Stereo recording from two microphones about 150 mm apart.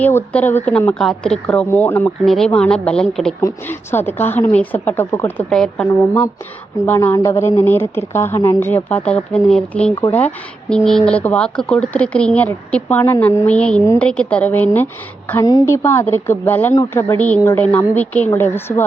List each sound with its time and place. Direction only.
0.0 s speech: 15° left (ahead or behind)
3.4 s speech: 15° left (ahead or behind)
6.8 s speech: 15° left (ahead or behind)